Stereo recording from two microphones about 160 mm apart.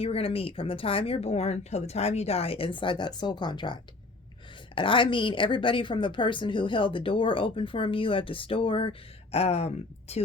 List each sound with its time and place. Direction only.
0.0 s speech: 35° left (ahead or behind)